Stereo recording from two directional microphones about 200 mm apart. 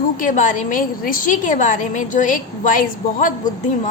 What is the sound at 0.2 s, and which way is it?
A woman's voice, 40° left (ahead or behind).